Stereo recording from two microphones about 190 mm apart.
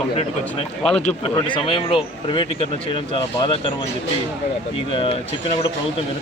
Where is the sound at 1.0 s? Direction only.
25° left (ahead or behind).